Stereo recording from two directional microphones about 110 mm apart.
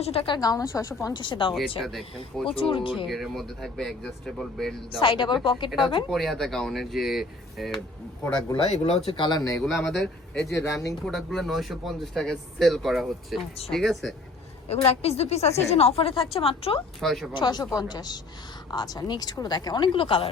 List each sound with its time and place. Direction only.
0.0 s speech: 60° left (ahead or behind)
0.3 s speech: 35° left (ahead or behind)
1.1 s a woman's voice: 45° left (ahead or behind)
1.8 s speech: centre (ahead or behind)
2.6 s a woman's voice: 55° left (ahead or behind)
3.1 s speech: centre (ahead or behind)
4.9 s a woman's voice: 50° left (ahead or behind)
6.1 s speech: 5° left (ahead or behind)
8.5 s speech: 75° left (ahead or behind)
9.0 s a woman's voice: 50° left (ahead or behind)
9.6 s speech: 5° left (ahead or behind)
14.8 s speech: 70° left (ahead or behind)
17.0 s speech: centre (ahead or behind)
17.3 s speech: 40° left (ahead or behind)